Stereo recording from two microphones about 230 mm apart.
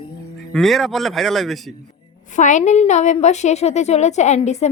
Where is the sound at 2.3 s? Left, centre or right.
Left.